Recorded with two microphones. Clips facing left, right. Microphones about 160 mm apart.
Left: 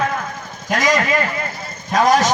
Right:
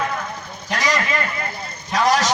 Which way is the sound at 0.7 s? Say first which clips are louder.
Left 5 dB; 45° left (ahead or behind).